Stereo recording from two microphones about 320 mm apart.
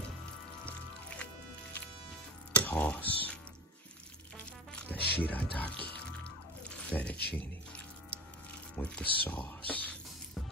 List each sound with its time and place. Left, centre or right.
1.1 s music: centre
2.5 s squish: centre
4.9 s music: left
5.2 s speech: centre
6.8 s speech: centre
7.3 s music: centre
8.7 s speech: centre